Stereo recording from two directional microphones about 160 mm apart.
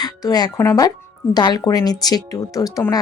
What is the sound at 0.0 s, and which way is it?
Speech, 25° left (ahead or behind).